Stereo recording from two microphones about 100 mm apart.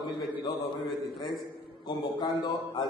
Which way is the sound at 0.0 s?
45° left (ahead or behind).